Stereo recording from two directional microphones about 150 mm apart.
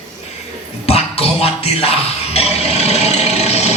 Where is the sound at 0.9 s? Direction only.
40° left (ahead or behind).